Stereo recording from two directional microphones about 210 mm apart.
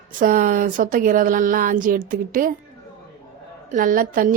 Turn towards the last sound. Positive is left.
turn(degrees=-40)  # may be behind; listen again after turning